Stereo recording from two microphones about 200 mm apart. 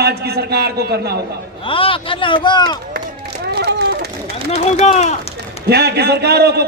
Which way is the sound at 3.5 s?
55° right (ahead or behind).